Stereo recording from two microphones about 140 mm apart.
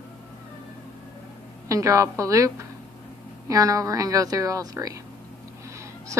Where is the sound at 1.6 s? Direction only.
25° right (ahead or behind).